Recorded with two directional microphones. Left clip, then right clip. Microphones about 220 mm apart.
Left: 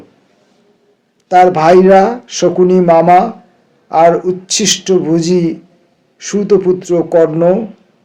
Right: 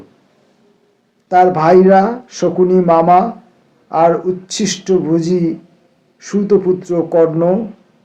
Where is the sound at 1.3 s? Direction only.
30° left (ahead or behind).